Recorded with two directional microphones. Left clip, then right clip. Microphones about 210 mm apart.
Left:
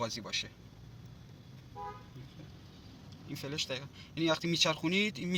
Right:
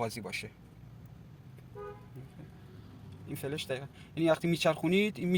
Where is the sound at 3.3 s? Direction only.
40° right (ahead or behind).